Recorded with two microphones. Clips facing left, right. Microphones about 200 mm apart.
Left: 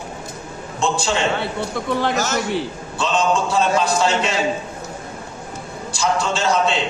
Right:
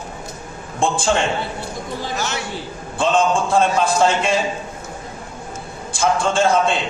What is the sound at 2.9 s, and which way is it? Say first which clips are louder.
A man's voice: right 2 dB; 55° right (ahead or behind).